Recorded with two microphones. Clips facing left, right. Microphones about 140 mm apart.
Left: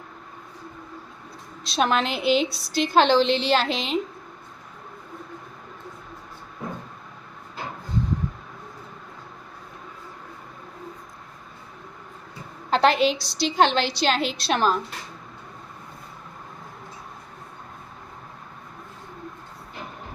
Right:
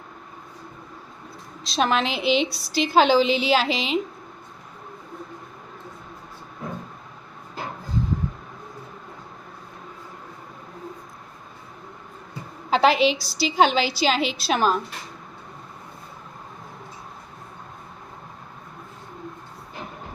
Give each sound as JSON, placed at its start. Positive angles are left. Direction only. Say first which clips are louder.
{"t": 1.6, "sound": "a woman's voice", "louder": "even", "side_deg": 0}
{"t": 12.7, "sound": "a woman's voice", "louder": "right 1 dB", "side_deg": -5}